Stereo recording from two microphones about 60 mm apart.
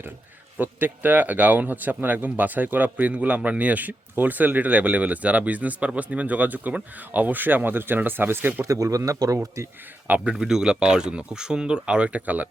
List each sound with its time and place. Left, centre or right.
0.6 s speech: right
8.6 s a man's voice: right
10.3 s speech: centre; by 12.5 s right